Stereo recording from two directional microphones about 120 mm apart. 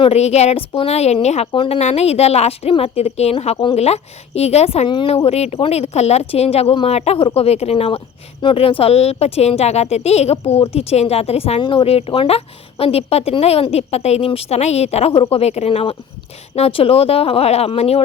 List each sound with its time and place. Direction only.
0.1 s speech: 65° left (ahead or behind)
1.5 s speech: 45° left (ahead or behind)
1.8 s speech: 60° left (ahead or behind)